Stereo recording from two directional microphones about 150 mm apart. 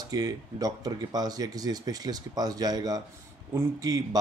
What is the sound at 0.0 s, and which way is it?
Speech, 25° right (ahead or behind).